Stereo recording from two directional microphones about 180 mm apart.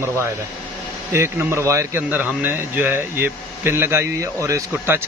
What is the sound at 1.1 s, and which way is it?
Speech, 15° right (ahead or behind).